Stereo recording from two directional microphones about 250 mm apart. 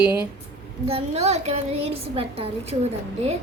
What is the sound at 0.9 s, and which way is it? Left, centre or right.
A child's voice, right.